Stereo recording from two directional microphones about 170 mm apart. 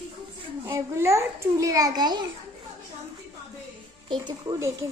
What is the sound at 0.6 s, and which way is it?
A child's voice, 15° right (ahead or behind).